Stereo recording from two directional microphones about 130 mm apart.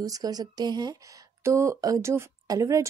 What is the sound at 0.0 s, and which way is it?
A woman's voice, 30° right (ahead or behind).